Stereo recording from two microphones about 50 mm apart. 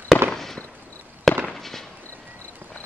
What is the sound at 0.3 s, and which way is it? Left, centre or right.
Fireworks, centre.